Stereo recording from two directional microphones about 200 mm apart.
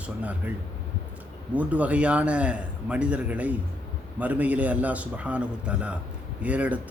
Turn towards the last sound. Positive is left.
turn(degrees=-5)  # may be behind; listen again after turning